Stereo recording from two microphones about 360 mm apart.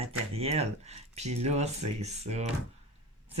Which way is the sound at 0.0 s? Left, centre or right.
Centre.